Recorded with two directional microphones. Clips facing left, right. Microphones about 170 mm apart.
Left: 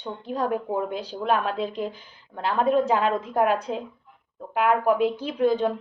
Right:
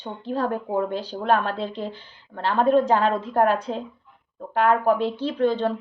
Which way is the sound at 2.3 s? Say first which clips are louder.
Right 2 dB; 5° left (ahead or behind).